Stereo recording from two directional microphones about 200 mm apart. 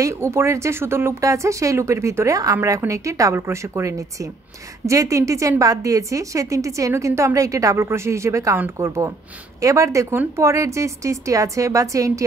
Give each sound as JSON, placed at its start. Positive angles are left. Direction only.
{"t": 0.0, "sound": "speech", "side_deg": -15}